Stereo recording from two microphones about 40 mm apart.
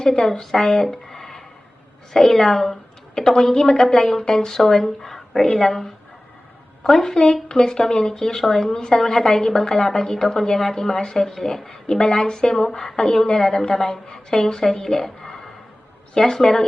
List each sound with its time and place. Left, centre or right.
0.0 s a woman's voice: centre
0.5 s a sound: centre
2.1 s a woman's voice: centre
7.4 s a woman's voice: left